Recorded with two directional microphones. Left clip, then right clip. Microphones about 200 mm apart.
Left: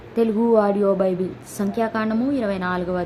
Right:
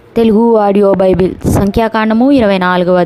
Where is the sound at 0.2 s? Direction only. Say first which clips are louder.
Right 9 dB; 45° right (ahead or behind).